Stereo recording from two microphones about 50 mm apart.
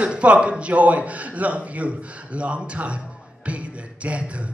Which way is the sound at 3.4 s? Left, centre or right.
Right.